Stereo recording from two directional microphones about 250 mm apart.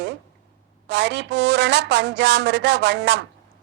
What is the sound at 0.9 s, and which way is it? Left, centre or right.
Speech, right.